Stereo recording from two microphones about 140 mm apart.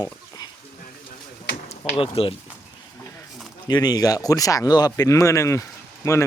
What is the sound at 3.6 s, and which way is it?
Speech, 30° left (ahead or behind).